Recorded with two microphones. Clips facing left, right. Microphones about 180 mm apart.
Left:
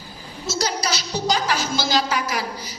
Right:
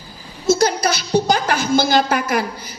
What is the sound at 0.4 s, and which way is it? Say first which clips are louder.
A woman's voice: right 9 dB; 55° right (ahead or behind).